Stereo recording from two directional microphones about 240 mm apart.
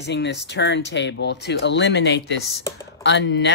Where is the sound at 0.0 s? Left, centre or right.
Left.